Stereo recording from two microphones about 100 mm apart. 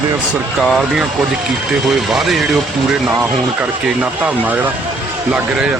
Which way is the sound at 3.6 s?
15° right (ahead or behind).